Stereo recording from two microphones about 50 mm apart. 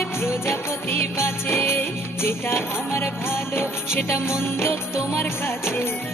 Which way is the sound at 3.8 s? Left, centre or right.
Centre.